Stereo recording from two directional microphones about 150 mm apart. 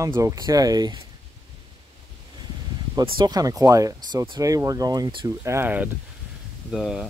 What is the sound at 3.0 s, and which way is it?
Speech, 25° right (ahead or behind).